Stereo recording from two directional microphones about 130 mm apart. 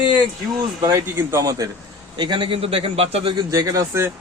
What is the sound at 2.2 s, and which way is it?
A man's voice, 35° right (ahead or behind).